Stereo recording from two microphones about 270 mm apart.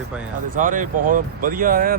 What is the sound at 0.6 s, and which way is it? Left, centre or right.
Speech, right.